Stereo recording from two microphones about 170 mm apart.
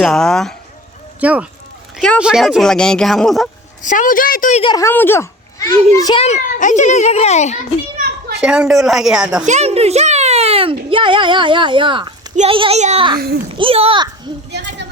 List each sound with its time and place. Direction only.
0.0 s speech: 5° left (ahead or behind)
1.2 s speech: 10° right (ahead or behind)
3.8 s a woman's voice: 50° left (ahead or behind)
4.6 s speech: 25° left (ahead or behind)
4.9 s a child's voice: 15° left (ahead or behind)
6.2 s a child's voice: 45° left (ahead or behind)
8.4 s speech: 5° right (ahead or behind)
9.5 s a child's voice: 40° right (ahead or behind)
13.1 s a child's voice: 65° right (ahead or behind)
13.5 s a child's voice: 35° right (ahead or behind)
14.5 s a sound: 90° right